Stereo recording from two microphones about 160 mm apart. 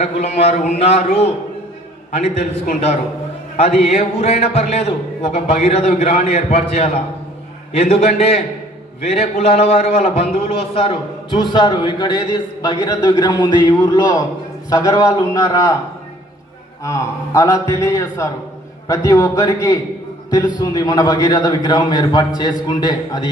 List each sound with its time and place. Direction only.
0.0 s a man's voice: 40° left (ahead or behind); by 15.7 s 20° left (ahead or behind)
16.8 s a man's voice: 20° left (ahead or behind)